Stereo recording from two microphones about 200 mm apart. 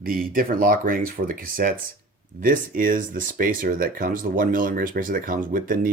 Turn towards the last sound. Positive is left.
turn(degrees=-45)  # may be behind; listen again after turning